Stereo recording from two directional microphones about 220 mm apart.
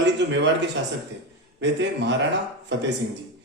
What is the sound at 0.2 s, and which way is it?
Speech, 50° right (ahead or behind).